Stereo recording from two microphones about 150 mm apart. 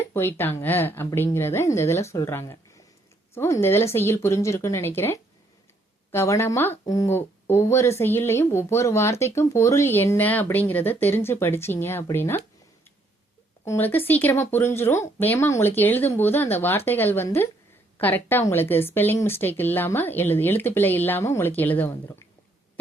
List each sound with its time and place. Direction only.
0.0 s speech: 15° left (ahead or behind)
13.7 s speech: 15° left (ahead or behind)